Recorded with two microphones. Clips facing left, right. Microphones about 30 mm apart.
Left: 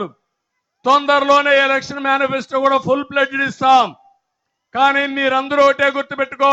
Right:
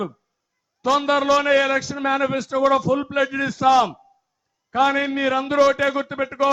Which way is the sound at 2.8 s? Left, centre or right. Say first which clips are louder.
Left 4 dB; left.